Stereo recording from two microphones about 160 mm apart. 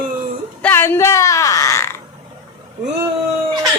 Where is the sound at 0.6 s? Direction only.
15° left (ahead or behind).